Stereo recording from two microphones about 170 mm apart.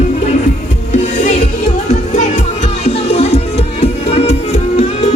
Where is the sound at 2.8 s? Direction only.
35° left (ahead or behind).